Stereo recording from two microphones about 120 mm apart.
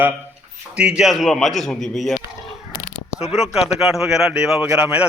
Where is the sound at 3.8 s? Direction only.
5° right (ahead or behind).